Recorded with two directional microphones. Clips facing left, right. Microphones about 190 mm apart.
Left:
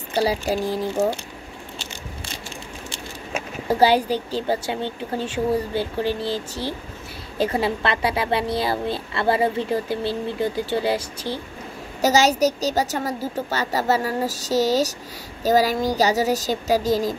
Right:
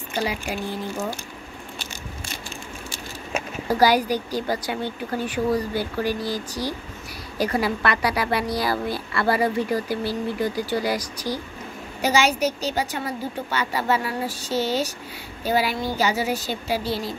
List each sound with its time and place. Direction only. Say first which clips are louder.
0.1 s a woman's voice: left 6 dB; 35° left (ahead or behind)
3.6 s a woman's voice: left 1 dB; 25° left (ahead or behind)
12.0 s a woman's voice: left 3 dB; 40° left (ahead or behind)